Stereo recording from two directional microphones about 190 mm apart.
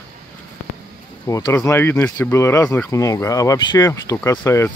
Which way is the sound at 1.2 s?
15° left (ahead or behind).